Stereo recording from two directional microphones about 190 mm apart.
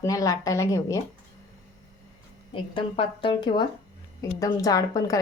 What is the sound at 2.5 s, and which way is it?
A woman's voice, 30° left (ahead or behind).